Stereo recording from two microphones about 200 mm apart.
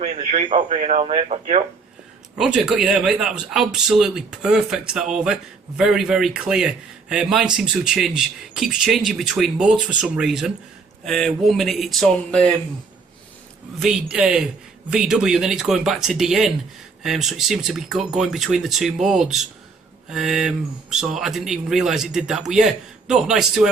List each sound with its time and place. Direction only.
0.0 s speech: 30° right (ahead or behind)
2.4 s a man's voice: centre (ahead or behind)
13.7 s a man's voice: centre (ahead or behind)